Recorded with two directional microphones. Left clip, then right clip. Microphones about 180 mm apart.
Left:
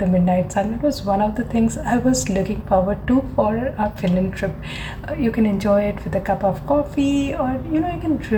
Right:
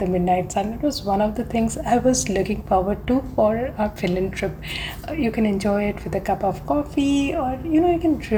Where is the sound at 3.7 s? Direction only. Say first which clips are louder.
Left 1 dB; 30° right (ahead or behind).